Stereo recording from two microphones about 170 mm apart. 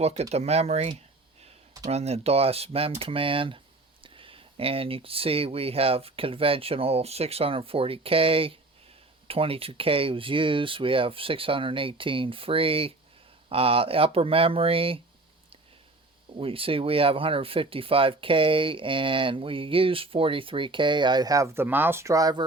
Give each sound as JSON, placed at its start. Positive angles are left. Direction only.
{"t": 0.0, "sound": "speech", "side_deg": -40}
{"t": 16.4, "sound": "speech", "side_deg": -35}